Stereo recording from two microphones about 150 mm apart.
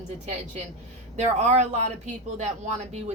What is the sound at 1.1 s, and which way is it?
Speech, 50° right (ahead or behind).